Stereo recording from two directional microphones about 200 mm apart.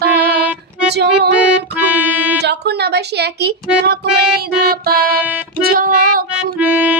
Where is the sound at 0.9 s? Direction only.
55° right (ahead or behind).